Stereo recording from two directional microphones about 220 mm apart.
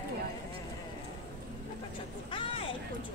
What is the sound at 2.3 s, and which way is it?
Speech, 25° left (ahead or behind).